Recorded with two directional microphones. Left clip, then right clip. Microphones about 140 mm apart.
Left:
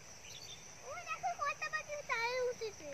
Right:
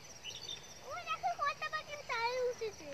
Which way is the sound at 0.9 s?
35° left (ahead or behind).